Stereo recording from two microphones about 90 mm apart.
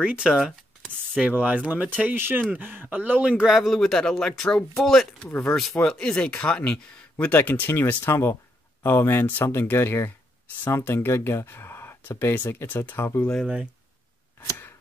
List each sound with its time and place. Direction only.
0.0 s speech: 10° right (ahead or behind); by 13.2 s 25° left (ahead or behind)